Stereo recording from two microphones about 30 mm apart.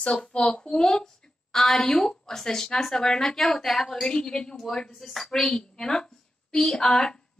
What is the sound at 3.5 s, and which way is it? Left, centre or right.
Speech, centre.